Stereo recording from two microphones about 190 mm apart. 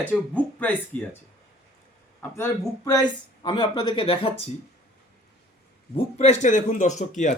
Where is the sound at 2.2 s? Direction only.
10° left (ahead or behind); by 4.5 s 30° left (ahead or behind).